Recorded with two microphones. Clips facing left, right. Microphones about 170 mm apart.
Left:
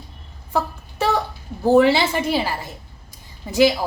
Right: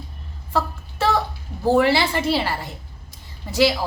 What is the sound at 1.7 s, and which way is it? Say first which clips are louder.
A woman's voice: left 3 dB; 20° left (ahead or behind).